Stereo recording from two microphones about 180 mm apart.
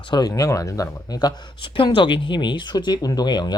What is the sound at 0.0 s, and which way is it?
Speech, 25° left (ahead or behind).